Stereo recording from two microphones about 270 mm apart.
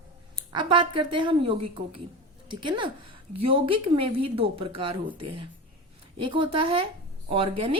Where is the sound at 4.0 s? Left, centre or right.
Right.